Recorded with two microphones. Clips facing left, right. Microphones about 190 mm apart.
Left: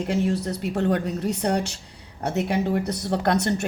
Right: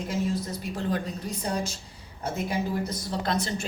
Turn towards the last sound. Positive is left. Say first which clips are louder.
# left 6 dB
turn(degrees=70)  # may be behind; listen again after turning